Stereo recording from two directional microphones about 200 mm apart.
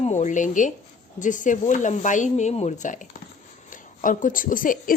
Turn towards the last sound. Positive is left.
turn(degrees=45)  # may be behind; listen again after turning